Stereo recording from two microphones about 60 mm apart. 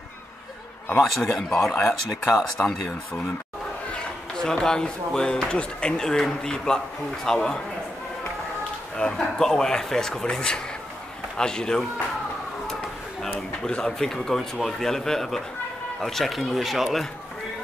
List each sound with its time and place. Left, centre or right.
1.0 s speech: centre
3.9 s speech: centre
8.9 s speech: centre
13.7 s speech: centre